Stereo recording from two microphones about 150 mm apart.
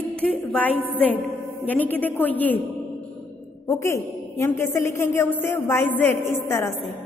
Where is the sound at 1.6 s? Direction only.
10° left (ahead or behind).